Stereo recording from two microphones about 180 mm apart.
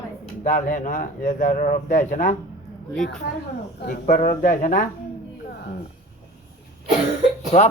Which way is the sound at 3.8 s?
55° left (ahead or behind).